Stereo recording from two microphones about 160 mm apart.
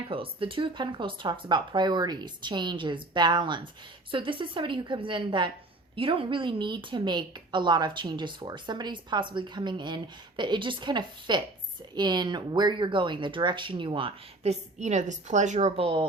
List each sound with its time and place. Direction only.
0.1 s a woman's voice: 35° right (ahead or behind)
14.8 s a woman's voice: 50° right (ahead or behind)